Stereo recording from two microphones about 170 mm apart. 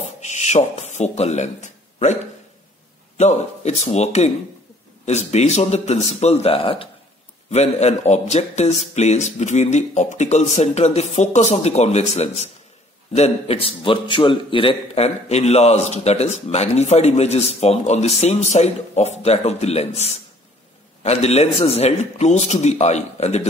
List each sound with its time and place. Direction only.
0.2 s speech: 40° left (ahead or behind)
3.2 s a man's voice: 40° left (ahead or behind)